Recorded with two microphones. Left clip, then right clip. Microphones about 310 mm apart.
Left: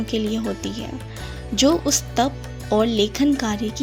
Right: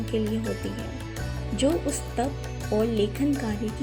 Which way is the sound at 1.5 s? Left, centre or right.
Left.